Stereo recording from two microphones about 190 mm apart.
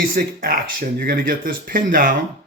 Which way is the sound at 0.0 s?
50° right (ahead or behind).